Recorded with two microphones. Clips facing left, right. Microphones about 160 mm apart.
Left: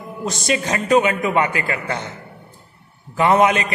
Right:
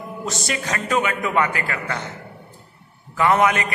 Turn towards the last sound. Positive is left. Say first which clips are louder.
# left 3 dB
turn(degrees=25)  # may be behind; listen again after turning